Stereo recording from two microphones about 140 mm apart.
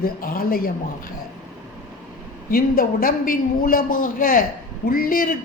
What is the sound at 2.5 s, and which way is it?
A woman's voice, 90° left.